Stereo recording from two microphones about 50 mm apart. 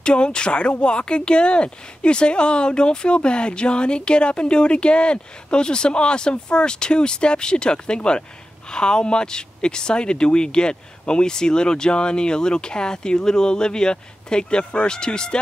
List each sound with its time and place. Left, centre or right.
0.0 s speech: centre